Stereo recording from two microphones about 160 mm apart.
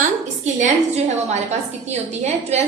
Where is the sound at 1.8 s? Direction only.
45° right (ahead or behind).